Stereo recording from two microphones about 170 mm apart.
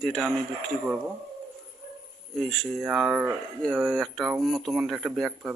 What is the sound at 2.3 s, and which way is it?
Speech, centre (ahead or behind).